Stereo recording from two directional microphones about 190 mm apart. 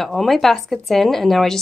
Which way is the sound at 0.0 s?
Centre (ahead or behind).